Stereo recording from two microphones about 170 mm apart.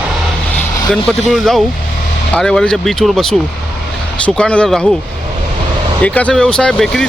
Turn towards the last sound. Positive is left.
turn(degrees=5)  # may be behind; listen again after turning